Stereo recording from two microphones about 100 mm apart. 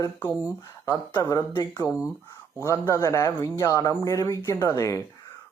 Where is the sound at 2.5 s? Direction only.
30° left (ahead or behind).